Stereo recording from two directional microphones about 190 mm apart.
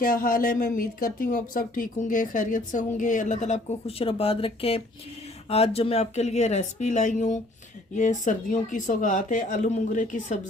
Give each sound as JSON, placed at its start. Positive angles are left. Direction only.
{"t": 0.0, "sound": "speech", "side_deg": 50}